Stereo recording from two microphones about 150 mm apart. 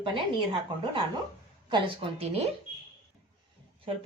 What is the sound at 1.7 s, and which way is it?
Speech, 40° right (ahead or behind).